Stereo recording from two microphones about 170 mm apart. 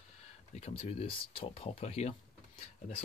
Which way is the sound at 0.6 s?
35° left (ahead or behind).